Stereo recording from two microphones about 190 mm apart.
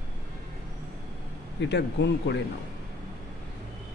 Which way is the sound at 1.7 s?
65° left (ahead or behind).